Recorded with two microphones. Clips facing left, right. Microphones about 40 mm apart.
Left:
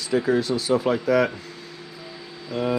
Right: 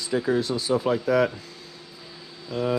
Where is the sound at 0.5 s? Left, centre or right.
Left.